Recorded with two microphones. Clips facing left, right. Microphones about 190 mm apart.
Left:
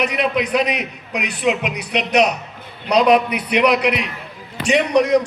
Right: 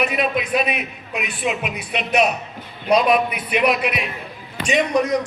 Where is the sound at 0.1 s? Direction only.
80° left.